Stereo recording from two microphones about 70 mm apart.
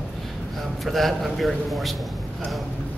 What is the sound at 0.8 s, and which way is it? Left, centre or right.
A man's voice, centre.